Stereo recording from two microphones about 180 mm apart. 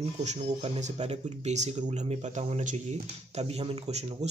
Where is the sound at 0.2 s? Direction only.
40° right (ahead or behind).